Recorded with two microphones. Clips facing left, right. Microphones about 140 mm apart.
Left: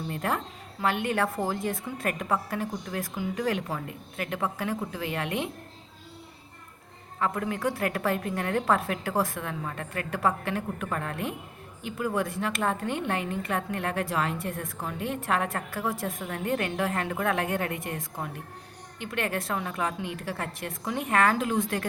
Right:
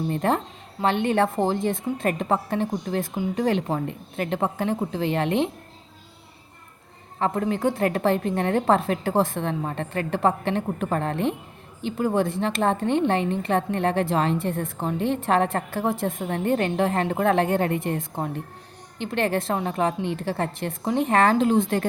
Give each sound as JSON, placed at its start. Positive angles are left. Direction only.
{"t": 0.1, "sound": "a woman's voice", "side_deg": -30}
{"t": 7.2, "sound": "a woman's voice", "side_deg": -30}